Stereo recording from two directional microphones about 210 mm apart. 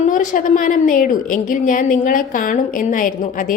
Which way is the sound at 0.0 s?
35° left (ahead or behind).